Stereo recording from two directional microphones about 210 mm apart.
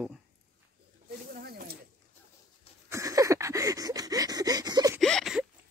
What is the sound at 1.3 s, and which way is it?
Snake, 45° right (ahead or behind).